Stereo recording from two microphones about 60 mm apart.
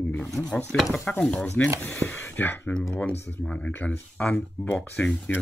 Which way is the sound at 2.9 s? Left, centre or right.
Centre.